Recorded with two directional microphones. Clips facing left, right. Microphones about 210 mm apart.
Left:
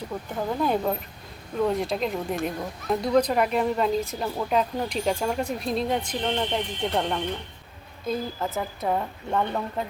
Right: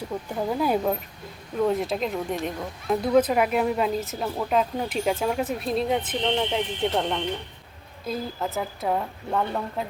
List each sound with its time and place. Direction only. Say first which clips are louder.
0.6 s speech: even; 5° right (ahead or behind)